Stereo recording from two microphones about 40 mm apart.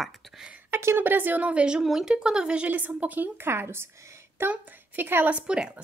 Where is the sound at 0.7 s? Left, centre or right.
Right.